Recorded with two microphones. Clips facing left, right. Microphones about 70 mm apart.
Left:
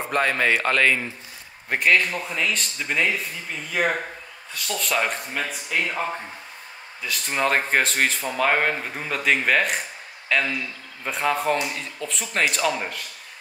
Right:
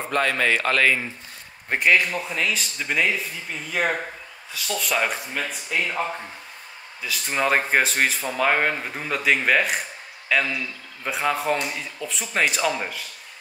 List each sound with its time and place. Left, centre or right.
0.1 s a man's voice: centre
0.5 s speech: centre